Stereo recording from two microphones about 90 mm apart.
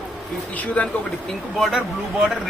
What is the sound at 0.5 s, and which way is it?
Speech, 15° left (ahead or behind).